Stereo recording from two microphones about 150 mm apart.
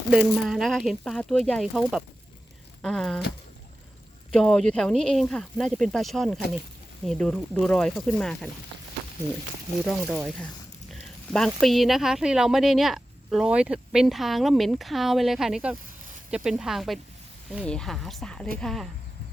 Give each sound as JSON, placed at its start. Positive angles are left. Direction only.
{"t": 0.1, "sound": "a woman's voice", "side_deg": -5}
{"t": 4.3, "sound": "a woman's voice", "side_deg": 5}
{"t": 9.8, "sound": "a woman's voice", "side_deg": 5}
{"t": 10.9, "sound": "a sound", "side_deg": 5}
{"t": 11.6, "sound": "a woman's voice", "side_deg": 0}